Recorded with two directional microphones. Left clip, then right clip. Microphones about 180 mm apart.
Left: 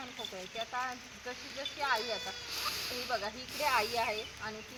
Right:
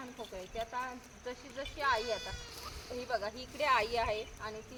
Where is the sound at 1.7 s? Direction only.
55° right (ahead or behind).